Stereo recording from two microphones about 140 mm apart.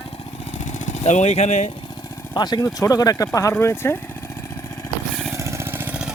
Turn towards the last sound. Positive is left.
turn(degrees=-10)  # may be behind; listen again after turning